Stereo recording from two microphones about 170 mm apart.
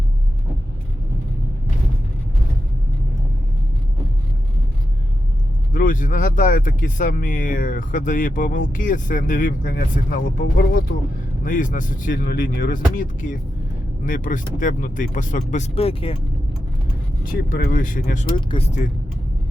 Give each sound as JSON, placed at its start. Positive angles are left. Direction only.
{"t": 5.7, "sound": "speech", "side_deg": 50}
{"t": 17.3, "sound": "speech", "side_deg": 55}
{"t": 18.3, "sound": "speech", "side_deg": 30}